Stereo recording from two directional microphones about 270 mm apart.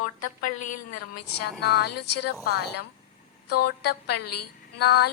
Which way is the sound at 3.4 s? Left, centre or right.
Left.